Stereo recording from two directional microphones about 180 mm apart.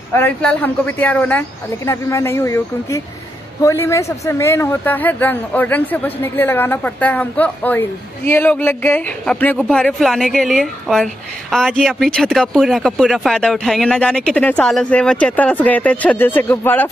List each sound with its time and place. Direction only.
0.1 s a man's voice: 10° left (ahead or behind)